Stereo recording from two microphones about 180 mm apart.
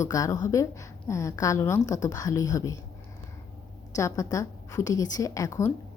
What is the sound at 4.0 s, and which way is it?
A woman's voice, 15° left (ahead or behind).